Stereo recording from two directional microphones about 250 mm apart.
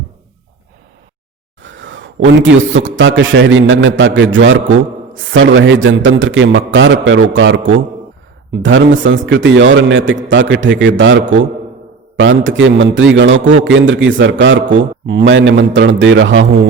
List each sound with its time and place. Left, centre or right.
1.6 s a man's voice: right